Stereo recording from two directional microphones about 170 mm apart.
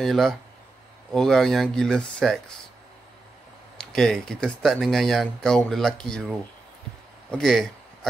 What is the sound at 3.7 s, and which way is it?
Speech, centre (ahead or behind).